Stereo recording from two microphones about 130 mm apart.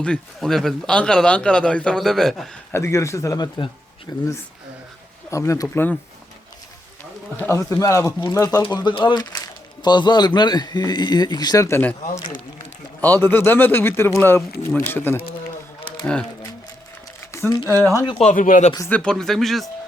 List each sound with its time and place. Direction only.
0.0 s a man's voice: 5° left (ahead or behind)
2.7 s speech: 20° left (ahead or behind)
5.3 s speech: 25° left (ahead or behind)
7.3 s a man's voice: 15° left (ahead or behind)
17.7 s speech: 20° left (ahead or behind)
18.2 s speech: 80° left
18.9 s speech: 10° left (ahead or behind)